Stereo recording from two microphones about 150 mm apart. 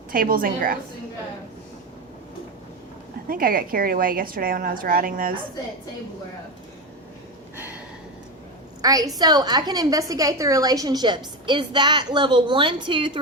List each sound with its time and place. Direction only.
0.1 s a woman's voice: 75° right (ahead or behind)
3.2 s a woman's voice: 75° right (ahead or behind)
8.8 s a woman's voice: 25° right (ahead or behind)